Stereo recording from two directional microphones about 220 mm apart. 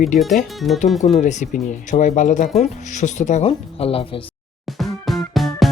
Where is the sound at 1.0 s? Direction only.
30° left (ahead or behind).